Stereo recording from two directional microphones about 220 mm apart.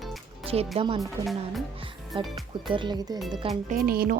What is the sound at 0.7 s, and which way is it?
Speech, 25° right (ahead or behind).